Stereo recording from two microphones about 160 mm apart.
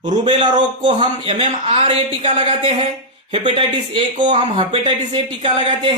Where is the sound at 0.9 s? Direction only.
30° right (ahead or behind).